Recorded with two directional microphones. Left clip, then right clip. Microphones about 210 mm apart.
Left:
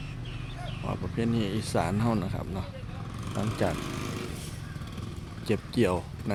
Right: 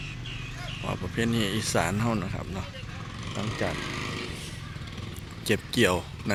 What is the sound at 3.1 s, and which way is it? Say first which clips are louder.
Vehicle: left 1 dB; 55° left (ahead or behind).